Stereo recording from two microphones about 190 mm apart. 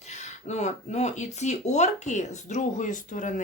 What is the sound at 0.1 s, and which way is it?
Speech, 35° left (ahead or behind).